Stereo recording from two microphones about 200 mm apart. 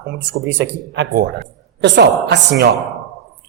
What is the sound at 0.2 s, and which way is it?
A woman's voice, 65° right (ahead or behind).